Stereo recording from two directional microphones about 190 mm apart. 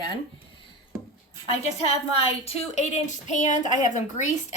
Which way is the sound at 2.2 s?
35° left (ahead or behind).